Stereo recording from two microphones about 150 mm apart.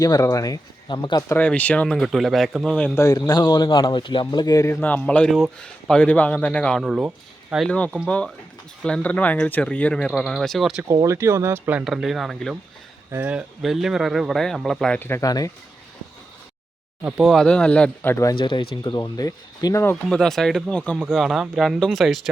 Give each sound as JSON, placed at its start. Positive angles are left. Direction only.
{"t": 0.0, "sound": "speech", "side_deg": 25}
{"t": 1.3, "sound": "speech", "side_deg": 10}
{"t": 2.9, "sound": "speech", "side_deg": 20}
{"t": 11.0, "sound": "speech", "side_deg": -20}
{"t": 13.1, "sound": "speech", "side_deg": -15}
{"t": 15.0, "sound": "speech", "side_deg": 15}
{"t": 17.0, "sound": "speech", "side_deg": -10}
{"t": 18.3, "sound": "speech", "side_deg": 35}
{"t": 20.1, "sound": "speech", "side_deg": 0}